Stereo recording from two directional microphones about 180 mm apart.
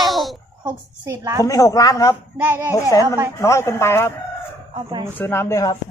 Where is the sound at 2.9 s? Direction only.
20° left (ahead or behind).